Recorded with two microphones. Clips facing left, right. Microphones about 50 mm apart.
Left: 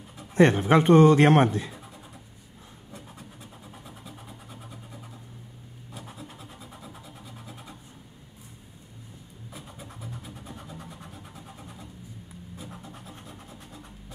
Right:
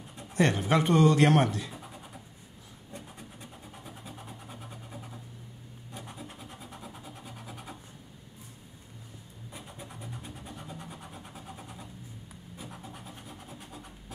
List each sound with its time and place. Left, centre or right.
0.3 s speech: left
3.7 s vehicle: centre
5.9 s vehicle: centre
9.5 s vehicle: centre
12.5 s a sound: centre